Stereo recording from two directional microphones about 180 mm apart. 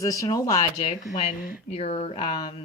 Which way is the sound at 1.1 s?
40° left (ahead or behind).